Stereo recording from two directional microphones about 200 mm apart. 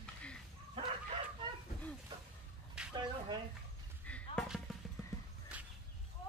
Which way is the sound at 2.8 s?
5° right (ahead or behind).